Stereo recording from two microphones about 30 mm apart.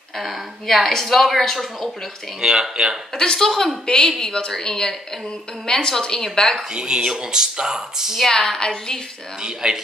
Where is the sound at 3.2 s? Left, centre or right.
Left.